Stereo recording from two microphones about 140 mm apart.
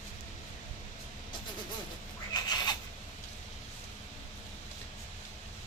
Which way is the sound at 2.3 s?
30° left (ahead or behind).